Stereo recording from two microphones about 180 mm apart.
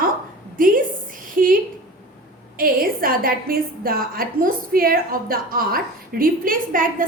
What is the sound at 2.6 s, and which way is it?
A woman's voice, 55° right (ahead or behind).